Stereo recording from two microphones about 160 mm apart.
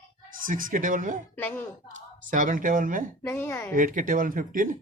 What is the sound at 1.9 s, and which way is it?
Speech, 55° right (ahead or behind).